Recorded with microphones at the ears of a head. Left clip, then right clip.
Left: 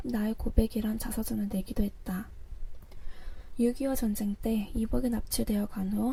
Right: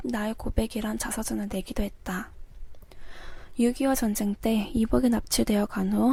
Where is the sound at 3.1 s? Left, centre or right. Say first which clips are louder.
Right 6 dB; right.